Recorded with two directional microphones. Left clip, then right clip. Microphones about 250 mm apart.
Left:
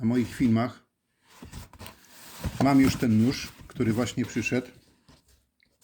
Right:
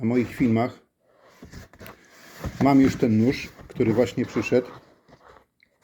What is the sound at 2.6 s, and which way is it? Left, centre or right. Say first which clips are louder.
A man's voice: right 3 dB; left.